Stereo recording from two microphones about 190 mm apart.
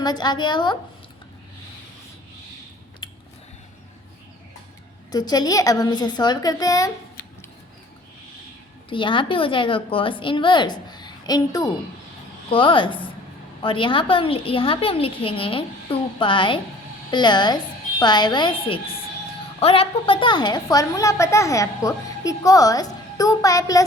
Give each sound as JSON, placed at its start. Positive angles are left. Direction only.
{"t": 0.0, "sound": "a woman's voice", "side_deg": 20}
{"t": 5.1, "sound": "a woman's voice", "side_deg": 20}
{"t": 8.9, "sound": "a woman's voice", "side_deg": 25}